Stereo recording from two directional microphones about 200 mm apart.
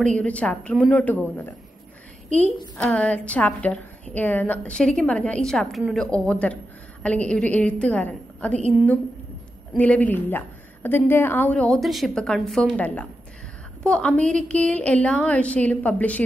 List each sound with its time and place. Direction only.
0.0 s a woman's voice: 5° left (ahead or behind)
2.2 s a woman's voice: 35° right (ahead or behind)
2.8 s a woman's voice: 5° left (ahead or behind)
9.8 s a woman's voice: 5° left (ahead or behind)